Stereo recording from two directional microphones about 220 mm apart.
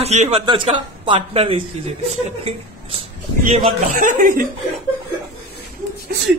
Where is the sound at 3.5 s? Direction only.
35° right (ahead or behind).